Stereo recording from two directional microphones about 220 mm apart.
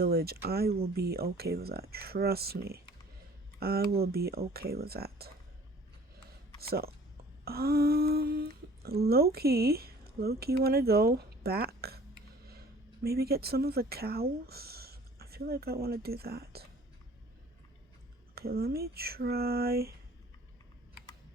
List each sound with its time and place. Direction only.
0.0 s speech: 45° right (ahead or behind)
6.6 s speech: 45° right (ahead or behind)
7.4 s humming: 45° right (ahead or behind)
9.0 s speech: 45° right (ahead or behind)
18.3 s speech: 45° right (ahead or behind)